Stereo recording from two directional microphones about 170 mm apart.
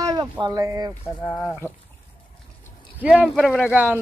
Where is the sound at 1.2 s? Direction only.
10° left (ahead or behind).